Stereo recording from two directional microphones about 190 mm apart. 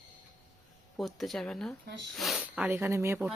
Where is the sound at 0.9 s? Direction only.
Centre (ahead or behind).